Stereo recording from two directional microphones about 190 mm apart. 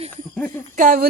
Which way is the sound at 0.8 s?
45° right (ahead or behind).